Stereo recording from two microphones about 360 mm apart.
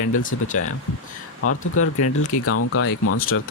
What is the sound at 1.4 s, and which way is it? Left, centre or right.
Speech, left.